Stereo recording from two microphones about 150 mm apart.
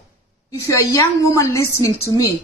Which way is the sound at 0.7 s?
20° left (ahead or behind).